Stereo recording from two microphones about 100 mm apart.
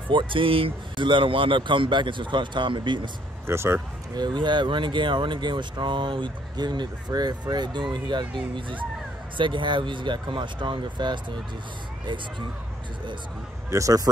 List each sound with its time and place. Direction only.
0.1 s speech: 60° right (ahead or behind)
3.4 s speech: 25° right (ahead or behind)
4.1 s speech: 45° right (ahead or behind)
9.4 s speech: 55° right (ahead or behind)
13.7 s a man's voice: 35° right (ahead or behind)